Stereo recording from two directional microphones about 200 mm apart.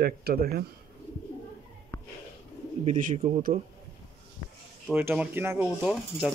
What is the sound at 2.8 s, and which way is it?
Speech, 40° right (ahead or behind).